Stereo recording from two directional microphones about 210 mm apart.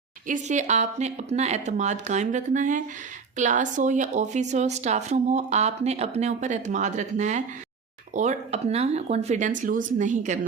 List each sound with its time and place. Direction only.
0.3 s speech: 35° right (ahead or behind)